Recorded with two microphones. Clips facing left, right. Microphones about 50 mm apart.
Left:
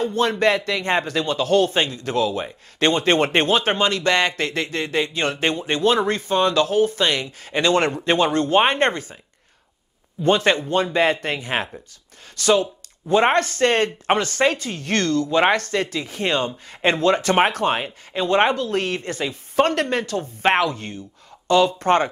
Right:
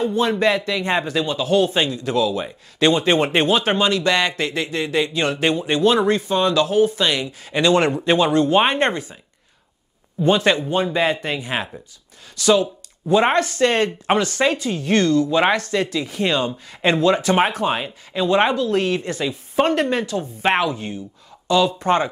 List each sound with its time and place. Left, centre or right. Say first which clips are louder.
0.4 s speech: even; left
10.2 s speech: right 1 dB; left
10.7 s speech: even; left
19.5 s speech: right 1 dB; left